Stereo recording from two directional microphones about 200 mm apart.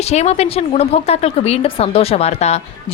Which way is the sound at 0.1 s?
35° left (ahead or behind).